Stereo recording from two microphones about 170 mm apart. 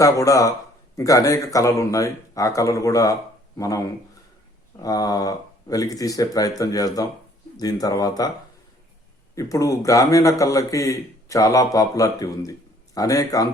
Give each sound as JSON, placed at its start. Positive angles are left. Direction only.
{"t": 0.0, "sound": "a man's voice", "side_deg": 20}
{"t": 9.3, "sound": "a man's voice", "side_deg": 20}